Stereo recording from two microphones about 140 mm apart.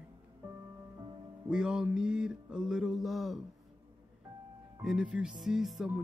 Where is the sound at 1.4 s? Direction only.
5° right (ahead or behind).